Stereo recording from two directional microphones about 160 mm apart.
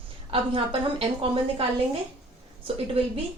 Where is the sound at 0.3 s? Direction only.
35° right (ahead or behind).